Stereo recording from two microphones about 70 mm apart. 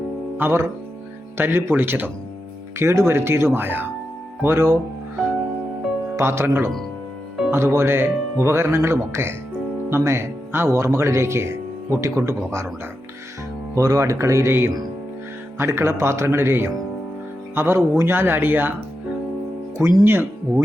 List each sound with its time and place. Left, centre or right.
0.3 s speech: right
2.7 s speech: right
6.1 s speech: right
13.7 s speech: right
20.1 s speech: right